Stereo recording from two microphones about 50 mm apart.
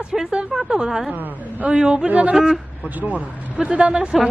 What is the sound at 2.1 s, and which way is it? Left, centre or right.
Speech, right.